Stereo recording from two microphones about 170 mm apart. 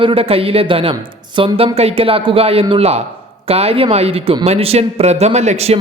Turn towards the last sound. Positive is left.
turn(degrees=-40)  # may be behind; listen again after turning